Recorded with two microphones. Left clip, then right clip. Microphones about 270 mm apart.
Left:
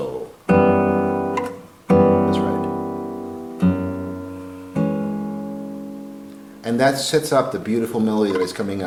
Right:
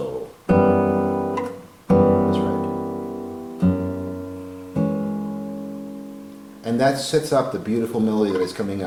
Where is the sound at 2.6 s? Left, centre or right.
Centre.